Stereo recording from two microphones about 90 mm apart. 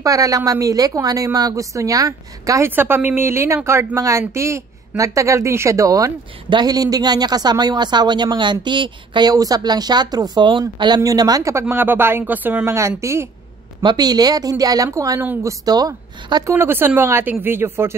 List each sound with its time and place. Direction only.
0.0 s a woman's voice: 40° right (ahead or behind)
2.7 s a woman's voice: 20° right (ahead or behind); by 9.3 s 60° right (ahead or behind)
9.3 s speech: 45° right (ahead or behind)
11.0 s speech: 45° right (ahead or behind)
11.7 s speech: 25° right (ahead or behind)
12.7 s a woman's voice: 35° right (ahead or behind)
13.8 s a woman's voice: 50° right (ahead or behind)
15.4 s speech: 45° right (ahead or behind)
16.5 s speech: 25° right (ahead or behind)